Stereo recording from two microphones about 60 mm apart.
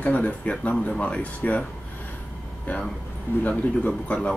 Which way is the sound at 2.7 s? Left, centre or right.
Left.